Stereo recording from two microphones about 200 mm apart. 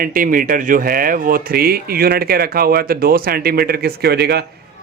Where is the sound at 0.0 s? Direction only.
45° right (ahead or behind).